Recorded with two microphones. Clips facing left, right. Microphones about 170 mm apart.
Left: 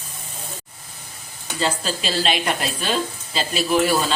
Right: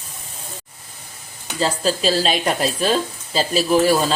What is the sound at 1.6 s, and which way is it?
Speech, 35° right (ahead or behind).